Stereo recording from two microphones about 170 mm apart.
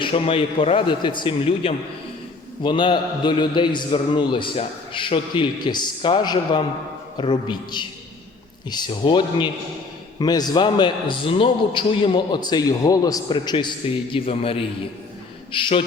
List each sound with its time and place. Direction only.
0.0 s a man's voice: 30° left (ahead or behind)